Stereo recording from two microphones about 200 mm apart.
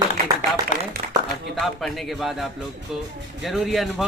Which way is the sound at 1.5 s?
Centre (ahead or behind).